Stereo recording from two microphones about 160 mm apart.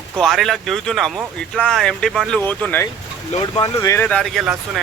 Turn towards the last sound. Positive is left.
turn(degrees=-5)  # may be behind; listen again after turning